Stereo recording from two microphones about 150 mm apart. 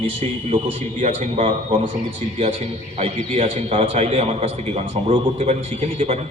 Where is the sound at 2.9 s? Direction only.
40° right (ahead or behind).